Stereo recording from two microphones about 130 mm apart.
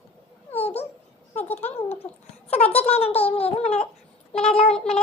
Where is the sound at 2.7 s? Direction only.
50° left (ahead or behind).